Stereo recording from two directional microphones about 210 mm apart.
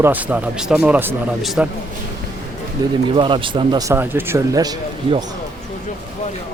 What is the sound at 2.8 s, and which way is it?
Speech, 15° right (ahead or behind).